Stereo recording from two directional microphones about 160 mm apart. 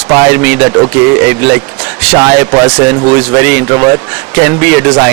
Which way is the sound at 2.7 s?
10° right (ahead or behind).